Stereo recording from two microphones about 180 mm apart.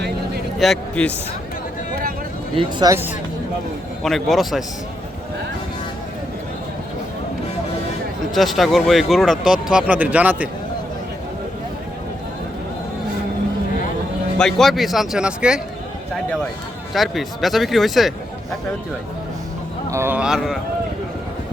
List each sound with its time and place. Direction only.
0.6 s speech: 5° left (ahead or behind)
2.6 s speech: 25° right (ahead or behind)
4.0 s speech: centre (ahead or behind)
8.3 s speech: centre (ahead or behind)
14.3 s speech: centre (ahead or behind)
16.9 s speech: centre (ahead or behind)
19.9 s speech: 10° right (ahead or behind)